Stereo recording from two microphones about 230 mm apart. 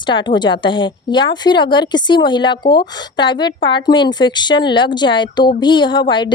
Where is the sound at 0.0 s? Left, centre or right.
Centre.